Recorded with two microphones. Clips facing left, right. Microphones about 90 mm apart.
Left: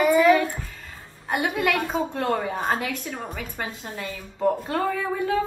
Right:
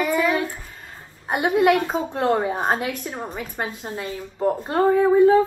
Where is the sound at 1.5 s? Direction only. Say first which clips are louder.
Right 9 dB; 40° right (ahead or behind).